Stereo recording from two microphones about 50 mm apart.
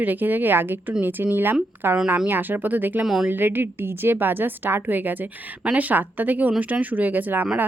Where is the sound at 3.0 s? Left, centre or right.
Centre.